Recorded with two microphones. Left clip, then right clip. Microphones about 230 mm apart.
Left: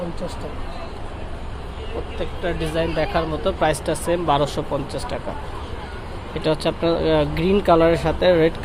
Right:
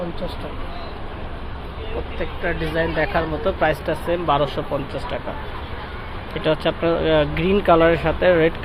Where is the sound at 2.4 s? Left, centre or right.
Centre.